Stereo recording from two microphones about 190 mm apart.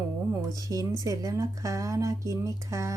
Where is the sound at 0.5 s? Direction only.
20° right (ahead or behind).